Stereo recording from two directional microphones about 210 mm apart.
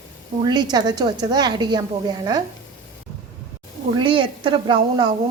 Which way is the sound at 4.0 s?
25° right (ahead or behind).